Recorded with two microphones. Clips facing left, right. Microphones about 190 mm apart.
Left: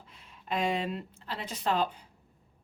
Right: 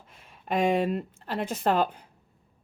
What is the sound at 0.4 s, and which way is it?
A woman's voice, 50° right (ahead or behind).